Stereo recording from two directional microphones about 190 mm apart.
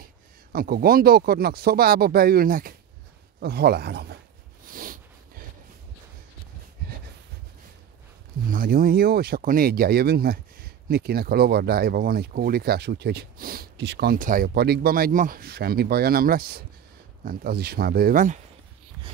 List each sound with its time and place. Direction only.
0.0 s speech: 50° right (ahead or behind)
4.6 s a sound: 45° right (ahead or behind)
8.5 s speech: 50° right (ahead or behind)